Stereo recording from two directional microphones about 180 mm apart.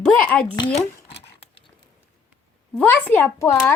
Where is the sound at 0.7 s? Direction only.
35° left (ahead or behind).